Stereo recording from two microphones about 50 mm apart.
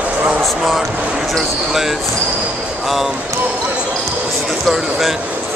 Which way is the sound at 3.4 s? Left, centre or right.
Right.